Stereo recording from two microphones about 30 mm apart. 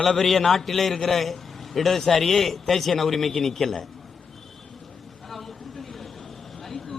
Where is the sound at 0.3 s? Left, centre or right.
Centre.